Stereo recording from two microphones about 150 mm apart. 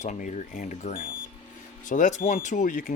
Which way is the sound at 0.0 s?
55° left (ahead or behind).